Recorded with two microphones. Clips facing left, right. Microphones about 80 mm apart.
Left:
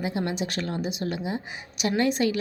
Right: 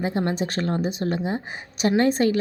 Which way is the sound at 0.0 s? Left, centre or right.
Right.